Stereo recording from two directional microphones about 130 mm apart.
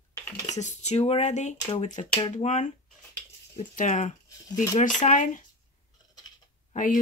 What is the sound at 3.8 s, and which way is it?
Speech, 70° left (ahead or behind).